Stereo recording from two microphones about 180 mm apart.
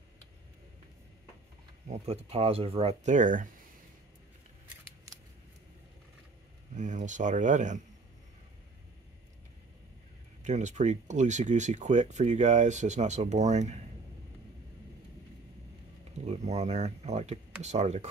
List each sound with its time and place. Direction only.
1.9 s speech: 35° right (ahead or behind)
6.7 s speech: 45° right (ahead or behind)
10.4 s speech: 40° right (ahead or behind)
16.3 s speech: 40° right (ahead or behind)